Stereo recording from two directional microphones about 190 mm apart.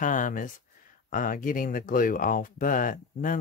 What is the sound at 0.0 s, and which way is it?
Speech, 45° left (ahead or behind).